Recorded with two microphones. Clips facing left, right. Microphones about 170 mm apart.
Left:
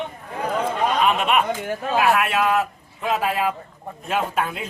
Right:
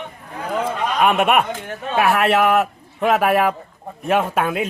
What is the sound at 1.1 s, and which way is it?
Speech, 60° right (ahead or behind).